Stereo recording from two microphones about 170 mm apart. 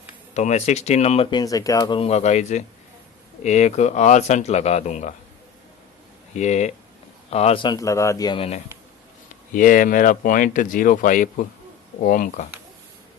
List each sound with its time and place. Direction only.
0.3 s speech: 40° left (ahead or behind)
6.3 s a man's voice: 45° left (ahead or behind); by 8.4 s 20° left (ahead or behind)
8.4 s speech: 40° left (ahead or behind)
9.6 s speech: 50° left (ahead or behind)